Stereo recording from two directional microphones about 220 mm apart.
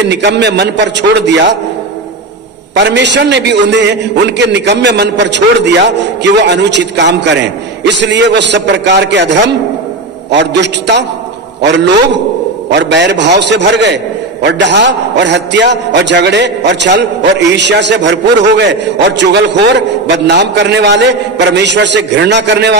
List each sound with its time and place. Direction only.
0.1 s a man's voice: 50° right (ahead or behind)
2.7 s a man's voice: 50° right (ahead or behind)